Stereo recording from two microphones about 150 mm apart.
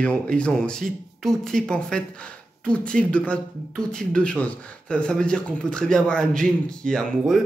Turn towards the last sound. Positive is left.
turn(degrees=5)  # may be behind; listen again after turning